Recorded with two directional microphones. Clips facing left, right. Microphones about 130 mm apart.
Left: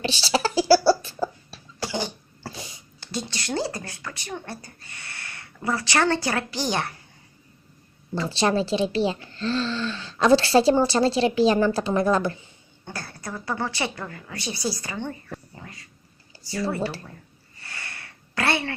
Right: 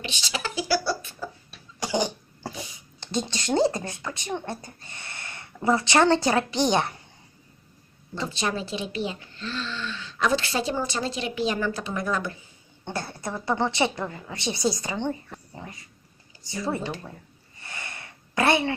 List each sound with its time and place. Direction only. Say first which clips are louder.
0.0 s a sound: left 9 dB; 35° left (ahead or behind)
1.8 s cough: right 3 dB; 15° right (ahead or behind)
3.0 s a woman's voice: right 3 dB; 20° right (ahead or behind)
8.3 s speech: left 8 dB; 30° left (ahead or behind)
12.8 s a woman's voice: right 4 dB; 25° right (ahead or behind)
17.6 s a sound: right 1 dB; 20° right (ahead or behind)